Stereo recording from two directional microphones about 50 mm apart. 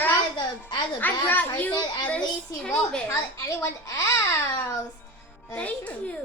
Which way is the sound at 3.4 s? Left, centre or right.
Left.